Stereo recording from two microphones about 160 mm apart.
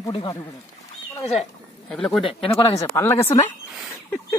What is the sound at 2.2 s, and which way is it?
Speech, 35° left (ahead or behind).